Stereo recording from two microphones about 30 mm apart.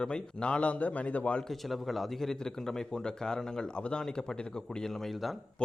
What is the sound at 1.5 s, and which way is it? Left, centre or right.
Speech, centre.